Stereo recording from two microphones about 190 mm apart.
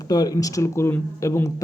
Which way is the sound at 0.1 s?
20° left (ahead or behind).